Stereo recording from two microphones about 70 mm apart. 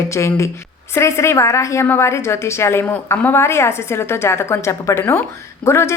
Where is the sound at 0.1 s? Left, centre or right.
Left.